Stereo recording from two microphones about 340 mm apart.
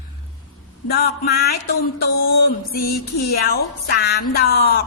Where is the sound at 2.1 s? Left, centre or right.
Left.